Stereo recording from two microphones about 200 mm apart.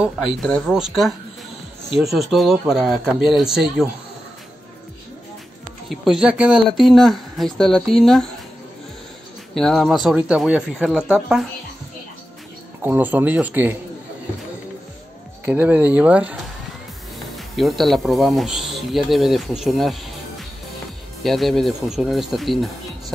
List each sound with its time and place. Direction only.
0.0 s speech: centre (ahead or behind)
5.9 s speech: centre (ahead or behind)
9.6 s speech: centre (ahead or behind)
12.8 s speech: 10° right (ahead or behind)
15.4 s speech: 10° right (ahead or behind)
17.6 s speech: centre (ahead or behind)